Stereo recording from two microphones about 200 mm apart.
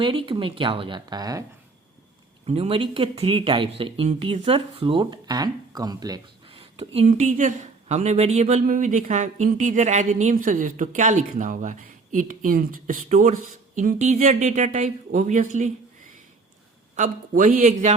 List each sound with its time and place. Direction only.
0.0 s speech: 25° right (ahead or behind)
2.5 s speech: 30° right (ahead or behind)
16.9 s speech: 40° right (ahead or behind)